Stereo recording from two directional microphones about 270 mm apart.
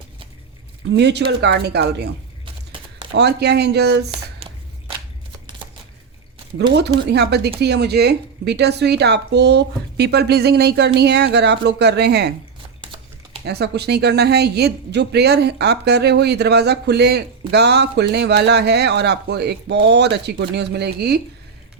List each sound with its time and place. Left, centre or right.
0.9 s speech: right
3.2 s speech: right
7.1 s speech: right
13.4 s speech: right